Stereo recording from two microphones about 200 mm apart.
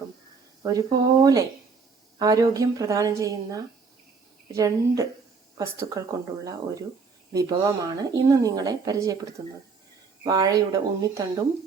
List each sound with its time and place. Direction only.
0.6 s a woman's voice: 20° right (ahead or behind)
7.3 s a woman's voice: 20° right (ahead or behind)